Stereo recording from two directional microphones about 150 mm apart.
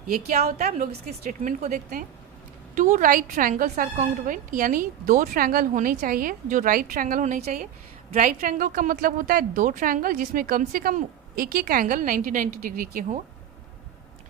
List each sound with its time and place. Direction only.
0.3 s a woman's voice: 45° right (ahead or behind); by 13.1 s 75° right (ahead or behind)